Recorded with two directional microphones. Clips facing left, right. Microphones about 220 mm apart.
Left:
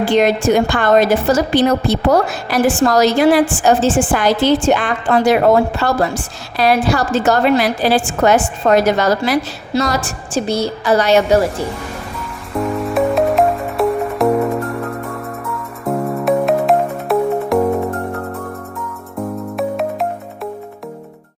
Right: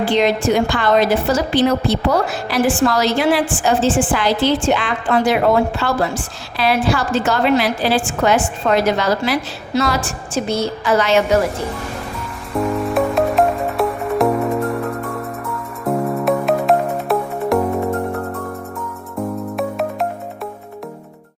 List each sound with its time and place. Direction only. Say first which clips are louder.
0.2 s a woman's voice: left 3 dB; 45° left (ahead or behind)
12.5 s music: left 1 dB; centre (ahead or behind)
19.5 s music: left 3 dB; centre (ahead or behind)